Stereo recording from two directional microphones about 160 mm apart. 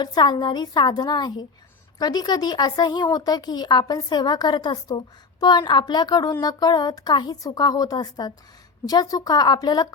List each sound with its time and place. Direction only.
0.0 s a woman's voice: 25° left (ahead or behind)